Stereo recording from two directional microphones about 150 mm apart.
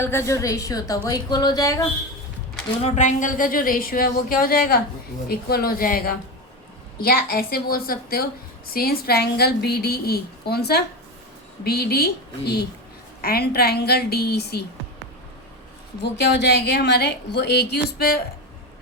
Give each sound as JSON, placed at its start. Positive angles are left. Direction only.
{"t": 0.0, "sound": "a woman's voice", "side_deg": 15}
{"t": 2.8, "sound": "speech", "side_deg": 50}
{"t": 5.3, "sound": "speech", "side_deg": 90}
{"t": 7.0, "sound": "a woman's voice", "side_deg": 90}
{"t": 16.2, "sound": "a woman's voice", "side_deg": 90}